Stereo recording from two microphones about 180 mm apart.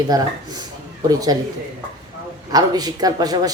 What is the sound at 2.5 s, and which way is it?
Speech, 20° right (ahead or behind).